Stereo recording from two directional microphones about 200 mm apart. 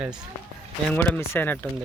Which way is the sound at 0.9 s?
10° left (ahead or behind).